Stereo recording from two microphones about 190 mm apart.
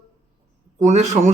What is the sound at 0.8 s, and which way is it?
Speech, 40° right (ahead or behind).